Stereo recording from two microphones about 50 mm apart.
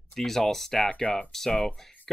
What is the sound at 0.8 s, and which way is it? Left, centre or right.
Speech, left.